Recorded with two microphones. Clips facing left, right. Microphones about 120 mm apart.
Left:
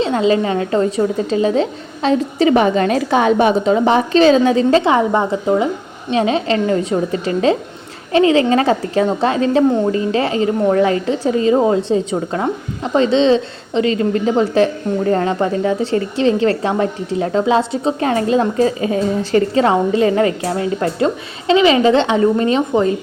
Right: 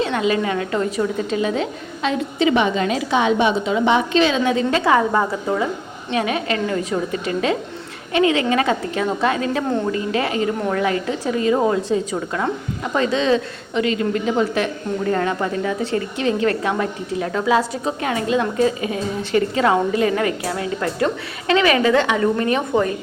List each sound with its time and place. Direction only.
0.0 s a woman's voice: 30° left (ahead or behind)
4.8 s a woman's voice: 20° left (ahead or behind)
21.4 s speech: 20° left (ahead or behind)